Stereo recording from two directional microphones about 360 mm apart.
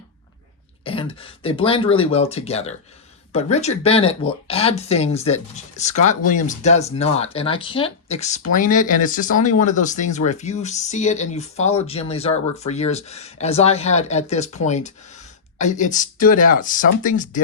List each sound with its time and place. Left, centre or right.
0.9 s speech: centre